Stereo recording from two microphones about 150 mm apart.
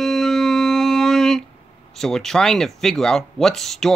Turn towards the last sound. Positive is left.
turn(degrees=0)  # may be behind; listen again after turning